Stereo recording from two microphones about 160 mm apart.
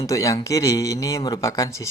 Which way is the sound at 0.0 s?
20° left (ahead or behind).